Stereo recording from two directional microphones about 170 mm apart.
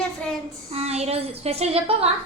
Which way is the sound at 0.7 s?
40° right (ahead or behind).